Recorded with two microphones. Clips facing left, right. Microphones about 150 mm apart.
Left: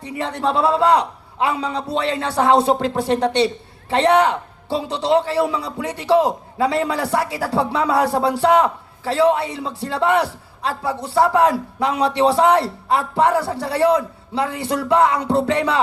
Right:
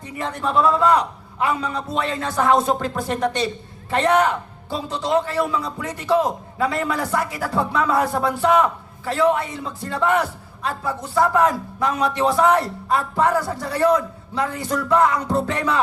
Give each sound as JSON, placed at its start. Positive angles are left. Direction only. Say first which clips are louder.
{"t": 0.0, "sound": "a man's voice", "louder": "left 4 dB", "side_deg": 30}